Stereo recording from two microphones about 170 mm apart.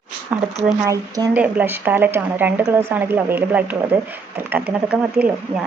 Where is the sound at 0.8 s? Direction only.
20° right (ahead or behind).